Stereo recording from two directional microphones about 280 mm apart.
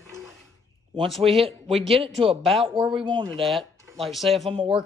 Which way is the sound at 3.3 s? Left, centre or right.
Centre.